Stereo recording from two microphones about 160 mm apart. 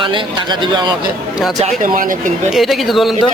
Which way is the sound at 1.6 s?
55° right (ahead or behind).